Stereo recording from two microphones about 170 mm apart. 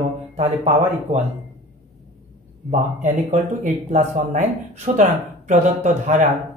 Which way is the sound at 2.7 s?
45° right (ahead or behind).